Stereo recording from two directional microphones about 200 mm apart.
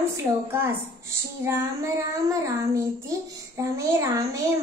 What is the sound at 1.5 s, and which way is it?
Speech, 15° right (ahead or behind).